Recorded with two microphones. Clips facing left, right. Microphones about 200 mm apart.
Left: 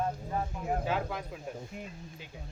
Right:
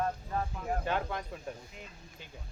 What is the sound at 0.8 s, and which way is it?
Speech, 5° left (ahead or behind).